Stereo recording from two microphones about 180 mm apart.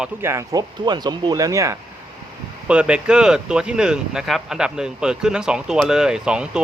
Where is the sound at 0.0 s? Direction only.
15° right (ahead or behind).